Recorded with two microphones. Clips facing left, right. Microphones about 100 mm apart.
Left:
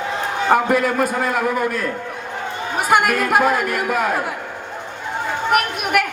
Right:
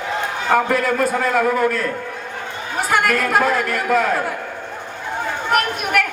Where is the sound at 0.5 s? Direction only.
15° left (ahead or behind).